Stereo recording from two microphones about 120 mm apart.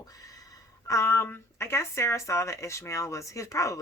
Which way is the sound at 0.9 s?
25° left (ahead or behind).